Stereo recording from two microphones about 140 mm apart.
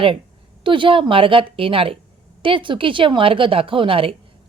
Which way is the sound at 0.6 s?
35° right (ahead or behind).